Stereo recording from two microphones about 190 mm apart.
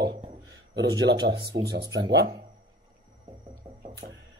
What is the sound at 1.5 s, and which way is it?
Speech, 60° right (ahead or behind).